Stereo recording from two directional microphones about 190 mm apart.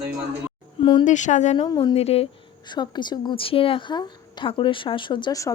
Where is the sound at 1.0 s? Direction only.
40° left (ahead or behind).